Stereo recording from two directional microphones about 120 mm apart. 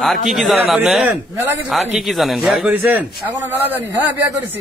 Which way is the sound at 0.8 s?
10° right (ahead or behind).